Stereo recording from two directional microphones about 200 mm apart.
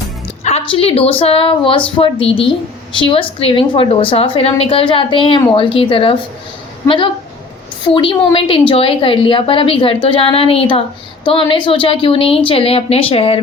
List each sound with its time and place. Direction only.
0.4 s a woman's voice: 30° left (ahead or behind)